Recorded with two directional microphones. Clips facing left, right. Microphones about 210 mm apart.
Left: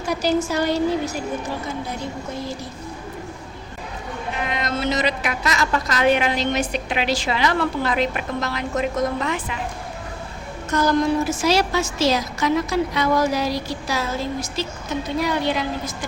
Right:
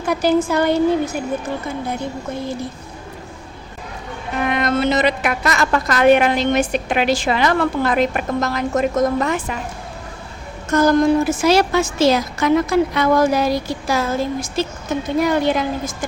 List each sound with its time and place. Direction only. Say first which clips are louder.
0.0 s a woman's voice: right 4 dB; 55° right (ahead or behind)
4.4 s a woman's voice: right 7 dB; 55° right (ahead or behind)
10.7 s a woman's voice: right 5 dB; 50° right (ahead or behind)